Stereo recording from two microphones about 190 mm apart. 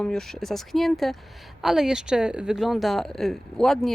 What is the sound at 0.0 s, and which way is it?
Speech, centre (ahead or behind).